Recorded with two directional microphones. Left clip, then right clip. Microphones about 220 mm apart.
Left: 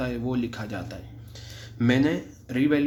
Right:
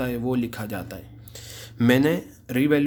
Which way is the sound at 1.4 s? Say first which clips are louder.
Right 3 dB; 30° right (ahead or behind).